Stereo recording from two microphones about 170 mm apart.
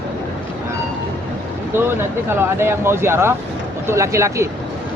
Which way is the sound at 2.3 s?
15° right (ahead or behind).